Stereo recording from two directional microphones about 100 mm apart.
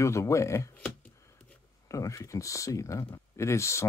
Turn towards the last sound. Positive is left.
turn(degrees=30)  # may be behind; listen again after turning